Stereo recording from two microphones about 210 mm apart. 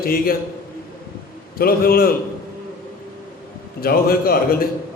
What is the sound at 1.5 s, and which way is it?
Speech, 45° left (ahead or behind).